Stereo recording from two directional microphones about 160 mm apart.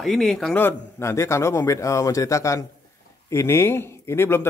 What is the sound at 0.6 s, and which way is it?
A man's voice, 15° left (ahead or behind).